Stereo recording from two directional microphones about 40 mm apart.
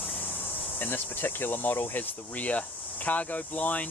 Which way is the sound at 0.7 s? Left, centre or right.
Left.